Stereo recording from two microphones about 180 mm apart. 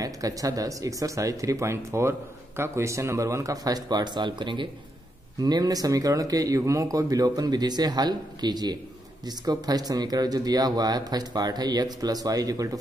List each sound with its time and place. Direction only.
0.0 s speech: 20° right (ahead or behind)